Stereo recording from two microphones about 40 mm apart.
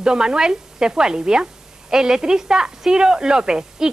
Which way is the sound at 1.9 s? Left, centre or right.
Centre.